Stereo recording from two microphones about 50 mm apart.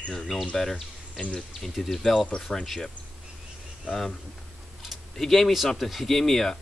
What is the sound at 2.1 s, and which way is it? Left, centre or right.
Speech, centre.